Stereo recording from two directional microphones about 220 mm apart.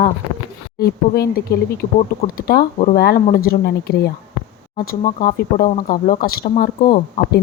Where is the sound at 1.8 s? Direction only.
30° left (ahead or behind).